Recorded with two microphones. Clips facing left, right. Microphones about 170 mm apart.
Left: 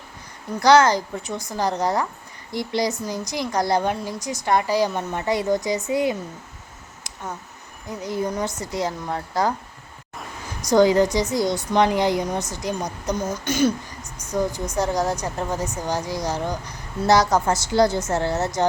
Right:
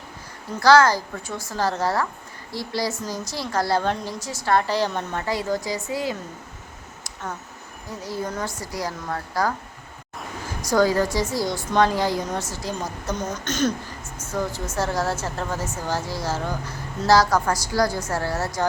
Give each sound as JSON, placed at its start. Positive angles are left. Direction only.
{"t": 0.6, "sound": "a woman's voice", "side_deg": 20}
{"t": 8.0, "sound": "a woman's voice", "side_deg": 20}
{"t": 10.7, "sound": "a woman's voice", "side_deg": 20}